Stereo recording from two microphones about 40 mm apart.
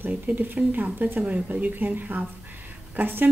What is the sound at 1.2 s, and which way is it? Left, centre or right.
A woman's voice, right.